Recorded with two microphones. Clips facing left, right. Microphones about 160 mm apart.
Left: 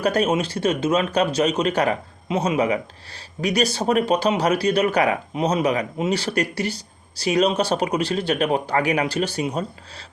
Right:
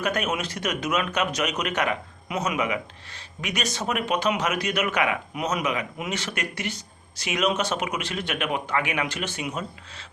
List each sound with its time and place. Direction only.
0.0 s a man's voice: 35° left (ahead or behind)